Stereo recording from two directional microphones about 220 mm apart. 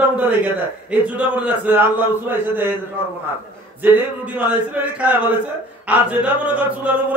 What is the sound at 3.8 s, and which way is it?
A man's voice, 5° right (ahead or behind).